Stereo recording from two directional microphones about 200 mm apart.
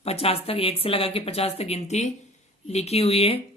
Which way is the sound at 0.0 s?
30° left (ahead or behind).